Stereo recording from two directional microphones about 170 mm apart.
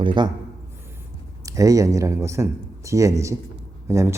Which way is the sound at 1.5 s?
20° right (ahead or behind).